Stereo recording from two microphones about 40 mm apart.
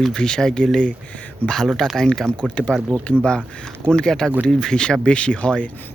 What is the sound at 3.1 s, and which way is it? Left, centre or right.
Speech, left.